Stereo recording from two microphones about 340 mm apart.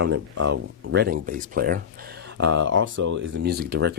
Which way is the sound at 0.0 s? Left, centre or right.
Right.